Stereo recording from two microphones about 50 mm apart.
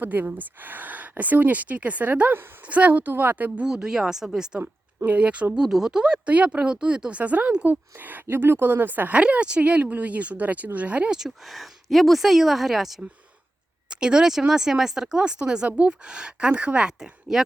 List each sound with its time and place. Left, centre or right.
0.0 s speech: right
3.7 s speech: centre
4.6 s a sound: right
5.1 s speech: right
5.5 s speech: centre
6.2 s speech: right
8.0 s speech: right
9.1 s speech: right
11.4 s a woman's voice: centre
13.9 s speech: centre
17.0 s speech: centre